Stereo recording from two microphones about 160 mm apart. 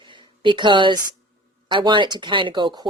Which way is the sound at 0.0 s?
30° right (ahead or behind).